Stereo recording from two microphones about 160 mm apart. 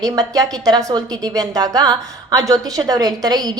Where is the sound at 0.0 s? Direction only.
20° right (ahead or behind).